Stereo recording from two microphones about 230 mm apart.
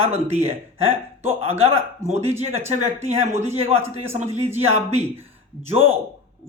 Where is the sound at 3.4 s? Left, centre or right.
Right.